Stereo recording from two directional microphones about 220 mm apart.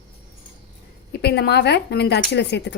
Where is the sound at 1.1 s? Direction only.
50° left (ahead or behind).